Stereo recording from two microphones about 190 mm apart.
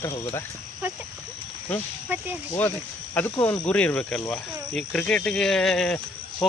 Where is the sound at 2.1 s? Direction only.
10° right (ahead or behind).